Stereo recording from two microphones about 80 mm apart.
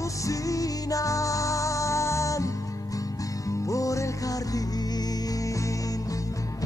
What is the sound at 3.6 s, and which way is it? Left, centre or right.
Music, left.